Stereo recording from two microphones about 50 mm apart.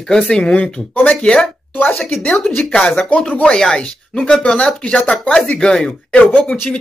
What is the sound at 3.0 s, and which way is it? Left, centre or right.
A man's voice, left.